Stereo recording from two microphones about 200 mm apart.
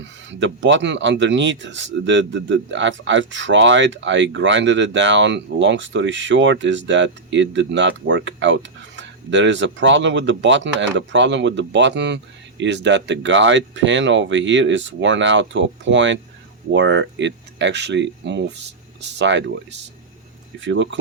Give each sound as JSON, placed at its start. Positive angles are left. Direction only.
{"t": 0.0, "sound": "speech", "side_deg": -65}